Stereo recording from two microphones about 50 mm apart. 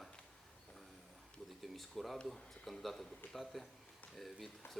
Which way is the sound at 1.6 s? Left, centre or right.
Centre.